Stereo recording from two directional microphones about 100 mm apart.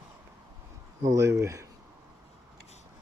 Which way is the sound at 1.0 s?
30° right (ahead or behind).